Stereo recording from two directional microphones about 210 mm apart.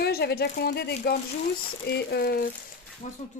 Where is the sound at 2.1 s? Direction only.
45° left (ahead or behind).